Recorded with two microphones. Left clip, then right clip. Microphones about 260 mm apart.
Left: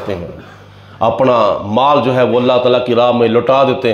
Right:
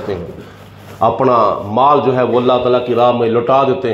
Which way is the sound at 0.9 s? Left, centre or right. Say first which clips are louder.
Even; left.